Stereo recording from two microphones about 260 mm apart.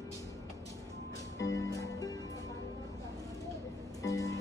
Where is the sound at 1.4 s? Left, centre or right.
Left.